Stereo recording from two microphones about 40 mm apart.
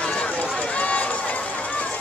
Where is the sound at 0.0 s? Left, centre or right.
Left.